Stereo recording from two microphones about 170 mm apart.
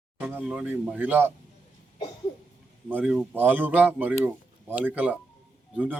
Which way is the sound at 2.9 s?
5° right (ahead or behind).